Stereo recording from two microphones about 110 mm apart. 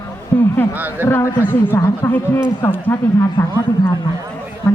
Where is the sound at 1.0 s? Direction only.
25° left (ahead or behind).